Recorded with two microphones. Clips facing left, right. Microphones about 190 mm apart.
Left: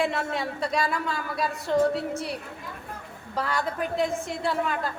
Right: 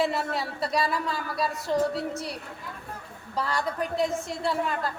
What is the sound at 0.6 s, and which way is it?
A woman's voice, centre (ahead or behind).